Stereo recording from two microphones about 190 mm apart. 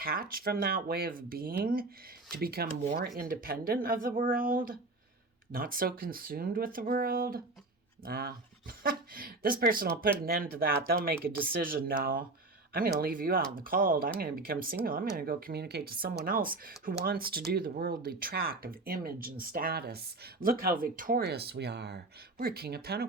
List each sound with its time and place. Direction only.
0.0 s speech: 50° right (ahead or behind)